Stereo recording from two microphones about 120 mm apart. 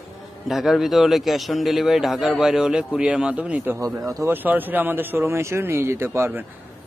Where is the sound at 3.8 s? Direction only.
30° right (ahead or behind).